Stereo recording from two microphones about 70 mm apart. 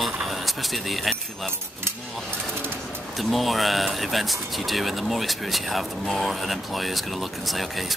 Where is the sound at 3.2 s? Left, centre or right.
Centre.